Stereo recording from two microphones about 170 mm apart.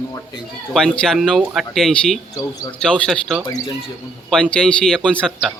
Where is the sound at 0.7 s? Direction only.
5° left (ahead or behind).